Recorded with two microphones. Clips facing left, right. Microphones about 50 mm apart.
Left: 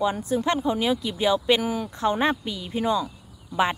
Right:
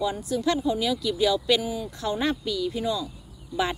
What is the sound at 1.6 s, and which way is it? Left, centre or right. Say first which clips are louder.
Speech: left 3 dB; left.